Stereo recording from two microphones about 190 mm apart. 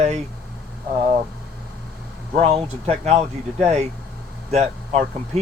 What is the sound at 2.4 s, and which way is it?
Speech, 30° right (ahead or behind).